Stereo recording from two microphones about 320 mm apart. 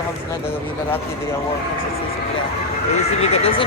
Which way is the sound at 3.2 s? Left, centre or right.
Centre.